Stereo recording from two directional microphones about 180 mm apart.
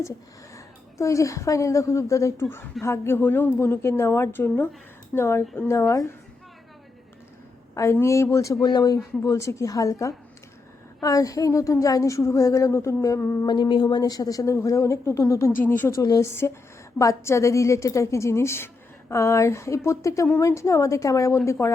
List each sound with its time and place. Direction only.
0.5 s a woman's voice: 15° left (ahead or behind)
7.8 s speech: 15° left (ahead or behind)
13.5 s speech: 25° left (ahead or behind)